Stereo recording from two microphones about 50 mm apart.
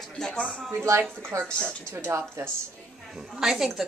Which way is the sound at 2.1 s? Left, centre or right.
Right.